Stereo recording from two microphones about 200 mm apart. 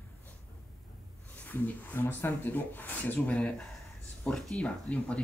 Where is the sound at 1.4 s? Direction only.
10° left (ahead or behind).